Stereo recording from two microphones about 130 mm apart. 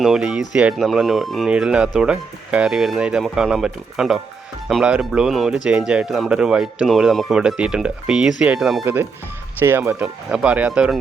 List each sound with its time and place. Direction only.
0.0 s speech: 5° right (ahead or behind)
8.8 s speech: 15° right (ahead or behind)